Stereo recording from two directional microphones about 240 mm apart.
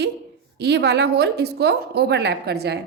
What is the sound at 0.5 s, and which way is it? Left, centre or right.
A woman's voice, right.